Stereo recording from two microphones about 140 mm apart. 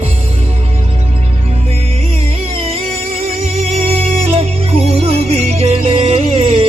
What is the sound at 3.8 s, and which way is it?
Music, 45° right (ahead or behind).